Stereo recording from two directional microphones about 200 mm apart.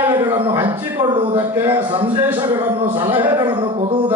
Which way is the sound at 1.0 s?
20° right (ahead or behind).